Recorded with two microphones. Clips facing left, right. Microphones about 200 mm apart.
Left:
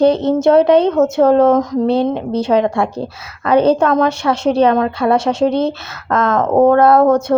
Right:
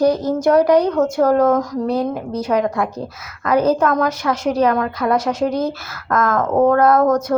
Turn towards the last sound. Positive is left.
turn(degrees=30)  # may be behind; listen again after turning